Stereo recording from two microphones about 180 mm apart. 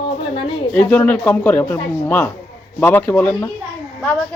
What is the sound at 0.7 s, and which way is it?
Speech, 10° left (ahead or behind).